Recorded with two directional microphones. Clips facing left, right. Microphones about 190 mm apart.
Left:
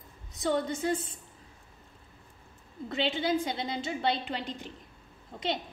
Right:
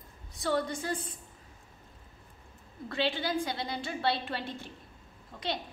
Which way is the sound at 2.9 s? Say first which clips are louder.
Left 2 dB; 20° left (ahead or behind).